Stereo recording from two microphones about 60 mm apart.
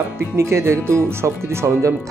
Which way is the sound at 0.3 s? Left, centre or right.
Right.